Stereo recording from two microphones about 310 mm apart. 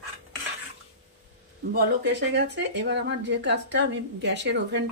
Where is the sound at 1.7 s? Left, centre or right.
Right.